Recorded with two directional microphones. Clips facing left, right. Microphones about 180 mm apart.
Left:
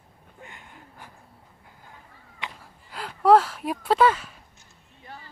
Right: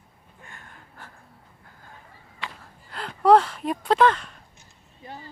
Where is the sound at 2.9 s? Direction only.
5° left (ahead or behind).